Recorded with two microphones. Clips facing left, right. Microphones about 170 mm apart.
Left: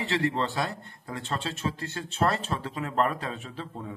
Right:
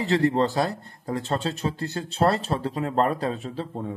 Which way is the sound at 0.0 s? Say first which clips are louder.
Right 6 dB; 35° right (ahead or behind).